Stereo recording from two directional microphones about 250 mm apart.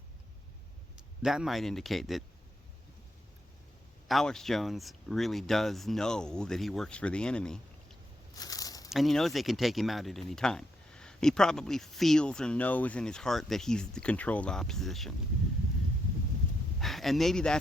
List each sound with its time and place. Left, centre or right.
0.9 s a man's voice: centre
4.1 s speech: centre
8.4 s a sound: centre
8.9 s speech: centre
16.8 s speech: centre